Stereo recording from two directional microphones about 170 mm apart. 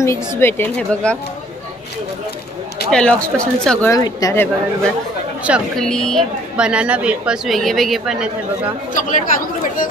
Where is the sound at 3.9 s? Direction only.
20° left (ahead or behind).